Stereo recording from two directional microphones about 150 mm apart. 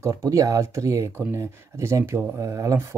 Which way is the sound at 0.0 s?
20° right (ahead or behind).